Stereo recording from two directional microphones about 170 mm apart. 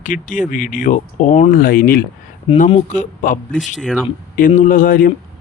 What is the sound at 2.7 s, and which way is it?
Speech, 45° left (ahead or behind).